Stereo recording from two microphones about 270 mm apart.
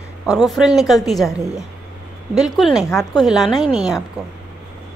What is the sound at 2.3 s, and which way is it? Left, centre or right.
A woman's voice, centre.